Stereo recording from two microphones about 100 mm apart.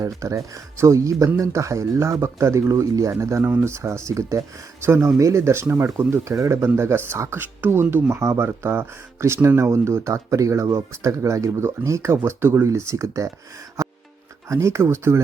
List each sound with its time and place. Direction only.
0.0 s speech: 30° right (ahead or behind)
13.8 s music: 30° right (ahead or behind)
14.4 s speech: 30° right (ahead or behind)